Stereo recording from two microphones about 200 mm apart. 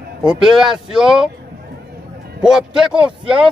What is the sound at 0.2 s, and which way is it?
Speech, 5° right (ahead or behind).